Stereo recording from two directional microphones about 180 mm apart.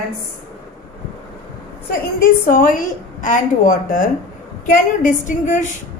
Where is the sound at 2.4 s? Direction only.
50° left (ahead or behind).